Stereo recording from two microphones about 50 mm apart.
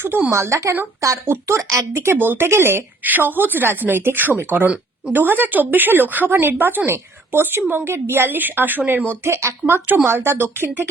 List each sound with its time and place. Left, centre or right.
0.3 s speech: right
1.0 s speech: right
2.1 s speech: right
3.0 s speech: right
9.0 s speech: right